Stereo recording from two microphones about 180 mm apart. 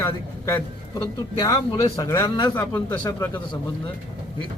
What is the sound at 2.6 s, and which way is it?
Speech, 10° left (ahead or behind).